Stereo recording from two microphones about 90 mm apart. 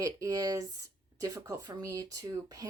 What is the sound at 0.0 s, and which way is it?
Speech, 40° right (ahead or behind).